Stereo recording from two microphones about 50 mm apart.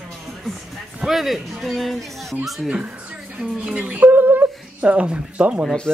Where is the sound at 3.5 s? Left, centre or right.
Right.